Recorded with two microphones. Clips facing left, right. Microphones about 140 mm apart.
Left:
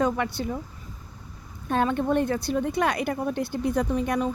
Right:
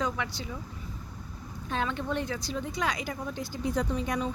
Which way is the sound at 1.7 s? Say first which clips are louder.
Left 8 dB; 50° left (ahead or behind).